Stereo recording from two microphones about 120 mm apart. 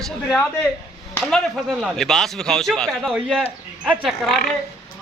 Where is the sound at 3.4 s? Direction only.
10° right (ahead or behind).